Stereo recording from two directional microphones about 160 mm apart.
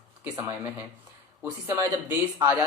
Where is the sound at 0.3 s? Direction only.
15° right (ahead or behind).